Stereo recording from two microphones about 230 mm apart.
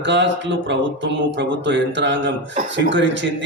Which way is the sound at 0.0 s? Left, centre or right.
Right.